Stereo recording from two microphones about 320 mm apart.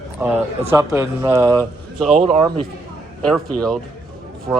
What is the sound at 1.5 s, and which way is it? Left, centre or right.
Speech, centre.